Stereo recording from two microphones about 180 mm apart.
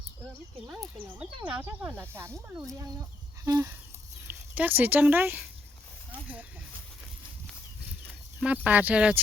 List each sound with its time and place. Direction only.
0.8 s speech: 10° right (ahead or behind)
3.4 s a sound: 20° right (ahead or behind)
4.3 s speech: 10° right (ahead or behind)
8.4 s speech: 10° right (ahead or behind)